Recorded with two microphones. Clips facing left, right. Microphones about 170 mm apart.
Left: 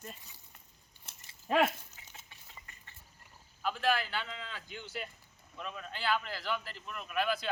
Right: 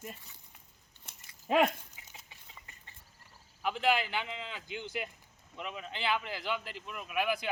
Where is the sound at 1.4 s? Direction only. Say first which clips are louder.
Right 2 dB; 15° right (ahead or behind).